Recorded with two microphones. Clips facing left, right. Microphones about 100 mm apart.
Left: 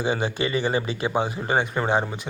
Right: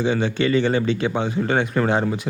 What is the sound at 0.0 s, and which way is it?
Speech, 10° left (ahead or behind).